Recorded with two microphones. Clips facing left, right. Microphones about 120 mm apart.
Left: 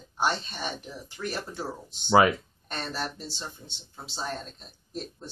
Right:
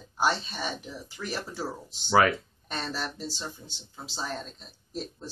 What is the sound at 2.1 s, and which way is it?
Speech, 20° left (ahead or behind).